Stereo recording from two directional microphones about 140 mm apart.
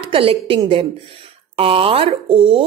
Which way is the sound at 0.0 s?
40° right (ahead or behind).